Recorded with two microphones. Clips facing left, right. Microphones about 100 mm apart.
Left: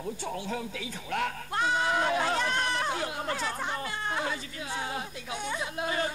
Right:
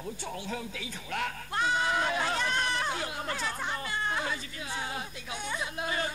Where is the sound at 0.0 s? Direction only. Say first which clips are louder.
Left 3 dB; 40° left (ahead or behind).